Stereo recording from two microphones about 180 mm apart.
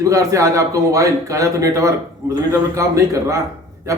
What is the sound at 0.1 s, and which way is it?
Speech, 20° right (ahead or behind).